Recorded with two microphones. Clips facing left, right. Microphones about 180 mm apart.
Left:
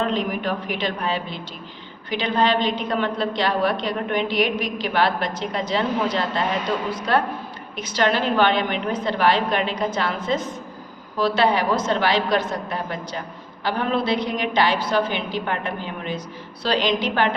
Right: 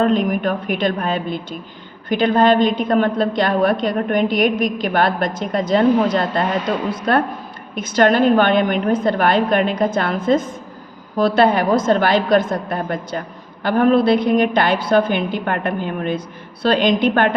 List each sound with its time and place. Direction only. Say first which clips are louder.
0.0 s a woman's voice: right 7 dB; 50° right (ahead or behind)